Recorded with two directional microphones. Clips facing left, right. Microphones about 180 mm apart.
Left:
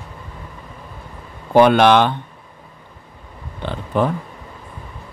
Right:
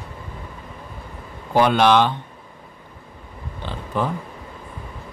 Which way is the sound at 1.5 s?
60° left (ahead or behind).